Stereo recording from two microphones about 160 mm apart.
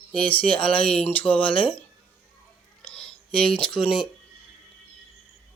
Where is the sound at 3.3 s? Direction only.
35° left (ahead or behind).